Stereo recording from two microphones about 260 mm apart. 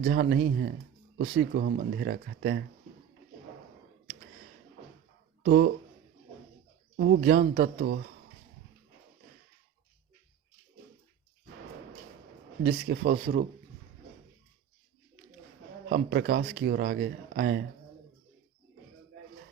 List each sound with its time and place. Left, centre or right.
0.0 s speech: right
5.4 s speech: right
6.9 s speech: right
12.6 s speech: right
15.9 s speech: right